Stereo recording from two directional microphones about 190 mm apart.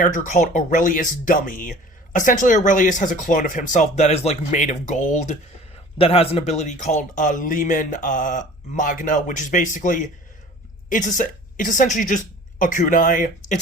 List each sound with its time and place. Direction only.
0.0 s a woman's voice: 40° left (ahead or behind)